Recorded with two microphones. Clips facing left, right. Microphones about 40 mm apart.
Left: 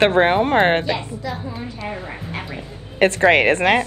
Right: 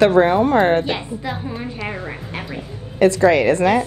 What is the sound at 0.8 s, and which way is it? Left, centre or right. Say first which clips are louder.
Speech: even; right.